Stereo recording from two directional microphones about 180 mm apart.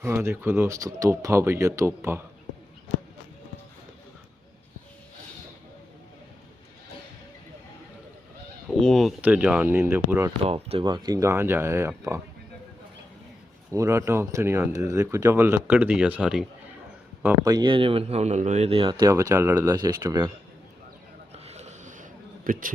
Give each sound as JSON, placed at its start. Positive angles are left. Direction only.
{"t": 0.0, "sound": "speech", "side_deg": -15}
{"t": 8.6, "sound": "speech", "side_deg": 0}
{"t": 10.4, "sound": "speech", "side_deg": -35}
{"t": 13.7, "sound": "speech", "side_deg": -15}
{"t": 17.2, "sound": "speech", "side_deg": -20}
{"t": 21.3, "sound": "a sound", "side_deg": -35}